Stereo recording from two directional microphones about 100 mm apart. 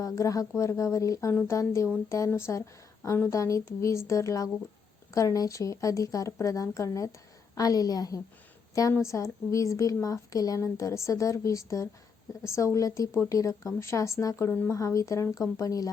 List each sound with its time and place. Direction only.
0.0 s a woman's voice: 35° left (ahead or behind)